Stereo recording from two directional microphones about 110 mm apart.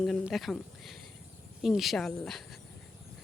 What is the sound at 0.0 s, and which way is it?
Speech, centre (ahead or behind).